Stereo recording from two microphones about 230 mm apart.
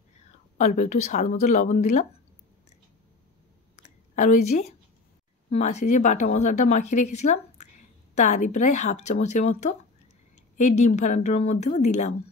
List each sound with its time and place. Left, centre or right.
0.6 s a woman's voice: left
3.7 s a sound: left
5.5 s a woman's voice: left